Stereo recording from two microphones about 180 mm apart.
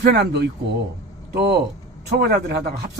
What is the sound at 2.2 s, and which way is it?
Speech, 55° right (ahead or behind).